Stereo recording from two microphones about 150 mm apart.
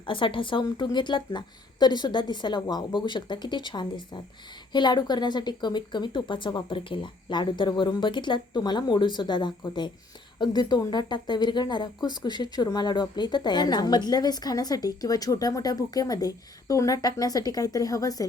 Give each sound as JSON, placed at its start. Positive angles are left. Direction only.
{"t": 0.0, "sound": "speech", "side_deg": 35}